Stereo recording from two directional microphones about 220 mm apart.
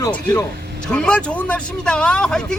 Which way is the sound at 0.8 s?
5° left (ahead or behind).